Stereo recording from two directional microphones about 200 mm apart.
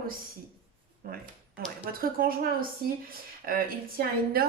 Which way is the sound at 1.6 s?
45° right (ahead or behind).